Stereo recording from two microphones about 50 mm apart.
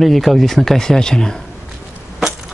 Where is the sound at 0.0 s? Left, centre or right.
Centre.